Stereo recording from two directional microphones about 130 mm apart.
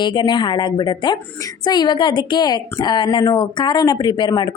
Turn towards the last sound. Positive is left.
turn(degrees=35)  # may be behind; listen again after turning